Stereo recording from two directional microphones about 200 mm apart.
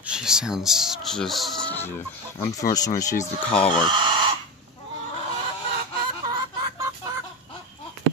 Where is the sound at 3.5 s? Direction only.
5° left (ahead or behind).